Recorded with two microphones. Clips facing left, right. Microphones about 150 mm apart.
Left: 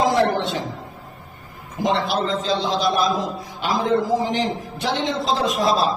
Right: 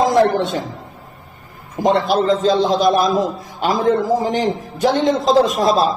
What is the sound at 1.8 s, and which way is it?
A man's voice, 45° right (ahead or behind).